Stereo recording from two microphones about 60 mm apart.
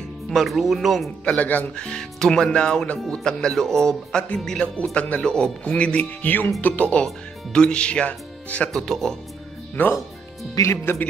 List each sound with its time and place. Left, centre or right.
0.3 s speech: centre
1.3 s speech: left
1.8 s speech: centre
8.7 s speech: centre
9.8 s speech: left
10.6 s speech: left